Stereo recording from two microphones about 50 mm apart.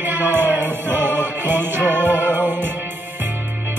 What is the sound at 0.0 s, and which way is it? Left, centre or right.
Music, right.